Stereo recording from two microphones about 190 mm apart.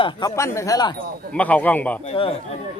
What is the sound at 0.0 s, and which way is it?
Speech, 25° left (ahead or behind).